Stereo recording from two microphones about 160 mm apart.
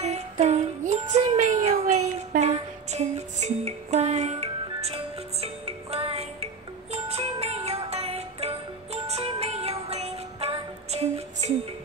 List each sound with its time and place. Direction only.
0.0 s music: 45° right (ahead or behind)